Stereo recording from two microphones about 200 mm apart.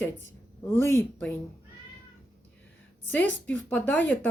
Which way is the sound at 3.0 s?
10° left (ahead or behind).